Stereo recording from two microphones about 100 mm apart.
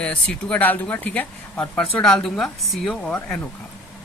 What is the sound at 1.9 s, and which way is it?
A woman's voice, 5° left (ahead or behind).